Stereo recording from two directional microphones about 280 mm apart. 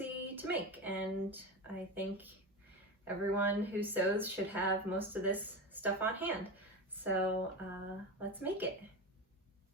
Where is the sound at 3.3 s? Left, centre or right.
Centre.